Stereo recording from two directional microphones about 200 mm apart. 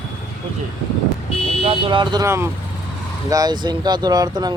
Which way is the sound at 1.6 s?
25° right (ahead or behind).